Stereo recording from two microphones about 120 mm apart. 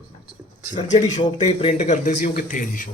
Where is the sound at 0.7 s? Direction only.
85° left.